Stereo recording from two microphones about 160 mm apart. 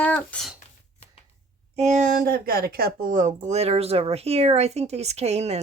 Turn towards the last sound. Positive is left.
turn(degrees=-40)  # may be behind; listen again after turning